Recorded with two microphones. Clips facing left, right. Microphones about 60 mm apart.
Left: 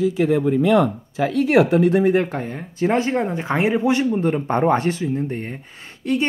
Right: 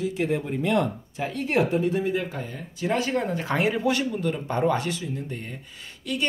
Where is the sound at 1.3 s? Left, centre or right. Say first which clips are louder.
Left 8 dB; left.